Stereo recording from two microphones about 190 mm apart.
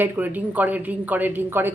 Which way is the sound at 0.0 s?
10° right (ahead or behind).